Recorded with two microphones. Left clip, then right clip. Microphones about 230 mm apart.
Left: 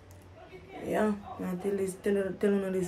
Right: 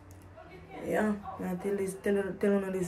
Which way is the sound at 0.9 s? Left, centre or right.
Centre.